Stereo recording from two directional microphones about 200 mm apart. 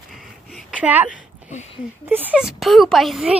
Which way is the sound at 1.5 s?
35° left (ahead or behind).